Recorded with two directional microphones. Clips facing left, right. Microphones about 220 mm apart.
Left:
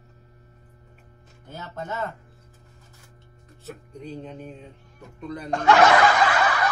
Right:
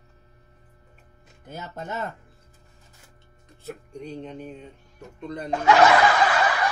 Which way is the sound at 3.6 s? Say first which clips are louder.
Right 2 dB; centre (ahead or behind).